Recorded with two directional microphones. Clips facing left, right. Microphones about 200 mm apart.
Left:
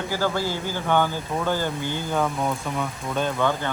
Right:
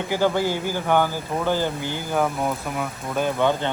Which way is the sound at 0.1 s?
15° right (ahead or behind).